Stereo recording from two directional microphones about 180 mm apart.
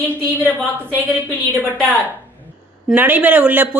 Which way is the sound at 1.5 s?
10° left (ahead or behind).